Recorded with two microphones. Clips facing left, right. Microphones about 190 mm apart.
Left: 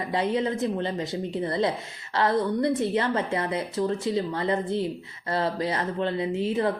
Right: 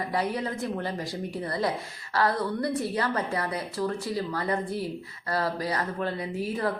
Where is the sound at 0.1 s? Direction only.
25° left (ahead or behind).